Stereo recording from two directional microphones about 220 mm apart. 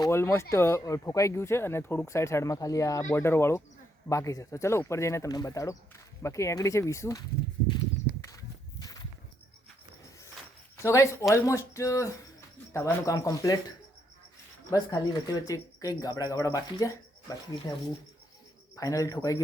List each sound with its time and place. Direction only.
0.0 s speech: 15° left (ahead or behind)
8.8 s walk: 15° left (ahead or behind)
10.8 s speech: 15° left (ahead or behind)
18.8 s speech: 15° left (ahead or behind)